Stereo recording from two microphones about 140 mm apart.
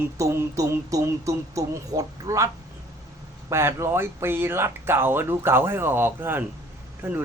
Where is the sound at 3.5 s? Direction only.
20° right (ahead or behind).